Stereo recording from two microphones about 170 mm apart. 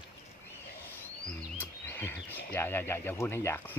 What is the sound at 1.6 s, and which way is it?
Speech, 10° left (ahead or behind).